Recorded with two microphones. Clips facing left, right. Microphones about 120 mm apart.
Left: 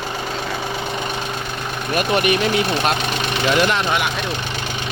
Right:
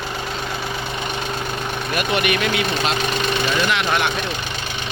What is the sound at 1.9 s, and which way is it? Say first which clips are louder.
Speech: left 3 dB; 35° left (ahead or behind).